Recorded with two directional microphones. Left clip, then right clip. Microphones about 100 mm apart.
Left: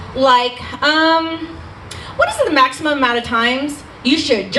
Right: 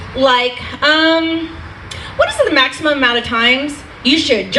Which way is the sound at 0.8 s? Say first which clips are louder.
Right 2 dB; 55° left (ahead or behind).